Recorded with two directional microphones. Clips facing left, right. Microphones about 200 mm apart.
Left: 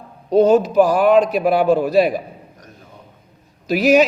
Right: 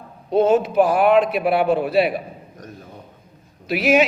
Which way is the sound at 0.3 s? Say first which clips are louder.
Left 3 dB; 40° left (ahead or behind).